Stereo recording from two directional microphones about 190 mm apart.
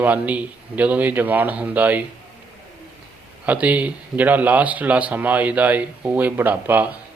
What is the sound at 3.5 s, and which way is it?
Speech, 5° right (ahead or behind).